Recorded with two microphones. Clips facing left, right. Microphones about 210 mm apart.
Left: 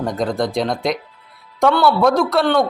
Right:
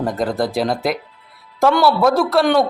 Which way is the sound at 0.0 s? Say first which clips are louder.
Even; 5° right (ahead or behind).